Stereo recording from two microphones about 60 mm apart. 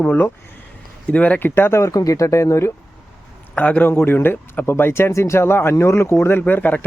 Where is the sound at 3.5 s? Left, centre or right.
Left.